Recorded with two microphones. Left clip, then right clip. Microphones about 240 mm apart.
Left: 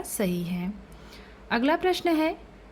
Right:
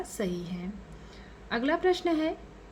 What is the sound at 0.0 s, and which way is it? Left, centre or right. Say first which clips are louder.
A woman's voice: left 4 dB; left.